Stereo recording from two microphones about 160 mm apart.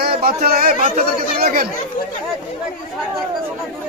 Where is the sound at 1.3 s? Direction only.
75° right (ahead or behind).